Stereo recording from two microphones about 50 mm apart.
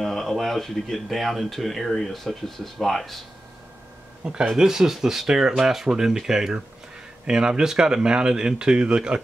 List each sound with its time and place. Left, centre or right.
0.0 s speech: centre
4.2 s speech: centre